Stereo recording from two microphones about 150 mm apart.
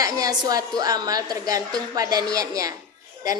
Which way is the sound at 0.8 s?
25° right (ahead or behind).